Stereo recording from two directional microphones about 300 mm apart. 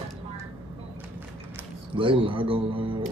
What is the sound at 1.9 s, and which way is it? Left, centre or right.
A man's voice, centre.